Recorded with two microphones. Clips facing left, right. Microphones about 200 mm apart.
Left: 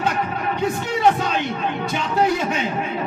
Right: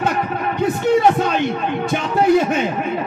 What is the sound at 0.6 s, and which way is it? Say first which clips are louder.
A man's voice: right 9 dB; 50° right (ahead or behind).